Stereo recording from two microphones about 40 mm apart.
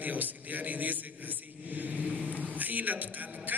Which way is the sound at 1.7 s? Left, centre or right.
Right.